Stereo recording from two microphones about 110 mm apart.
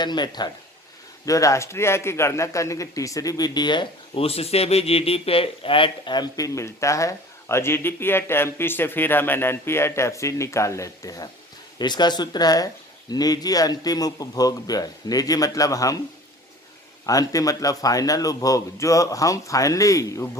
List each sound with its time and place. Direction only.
0.0 s speech: 40° left (ahead or behind)
1.2 s speech: 30° left (ahead or behind)
4.2 s speech: 65° left (ahead or behind); by 16.0 s 30° left (ahead or behind)
17.1 s speech: 30° left (ahead or behind)